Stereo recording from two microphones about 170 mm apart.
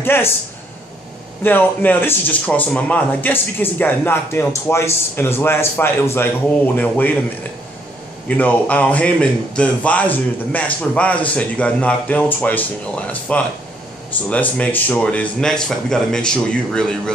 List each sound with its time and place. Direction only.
0.0 s speech: 15° left (ahead or behind)
1.4 s speech: 10° left (ahead or behind)
8.3 s speech: 10° left (ahead or behind)